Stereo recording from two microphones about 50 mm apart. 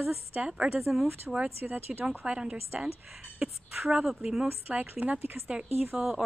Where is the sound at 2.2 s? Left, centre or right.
Right.